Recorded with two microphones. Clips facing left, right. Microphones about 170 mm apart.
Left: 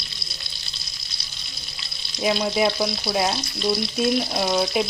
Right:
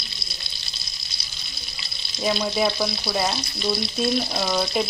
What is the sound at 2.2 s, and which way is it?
Frying, 5° left (ahead or behind).